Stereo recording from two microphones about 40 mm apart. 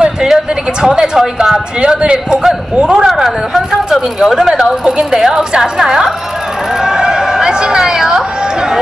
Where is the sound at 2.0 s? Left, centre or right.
Right.